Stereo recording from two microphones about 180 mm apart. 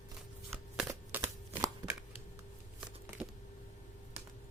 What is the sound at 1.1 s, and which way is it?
Chopping, 10° right (ahead or behind).